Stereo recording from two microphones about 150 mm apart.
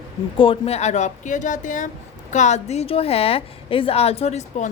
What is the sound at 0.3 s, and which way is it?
A woman's voice, 35° left (ahead or behind).